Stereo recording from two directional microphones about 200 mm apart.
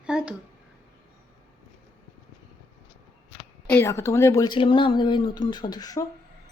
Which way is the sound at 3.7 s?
10° left (ahead or behind).